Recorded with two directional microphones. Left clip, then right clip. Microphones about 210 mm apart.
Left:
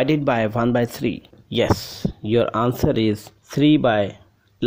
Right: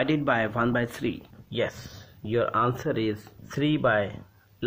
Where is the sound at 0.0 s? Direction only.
45° left (ahead or behind).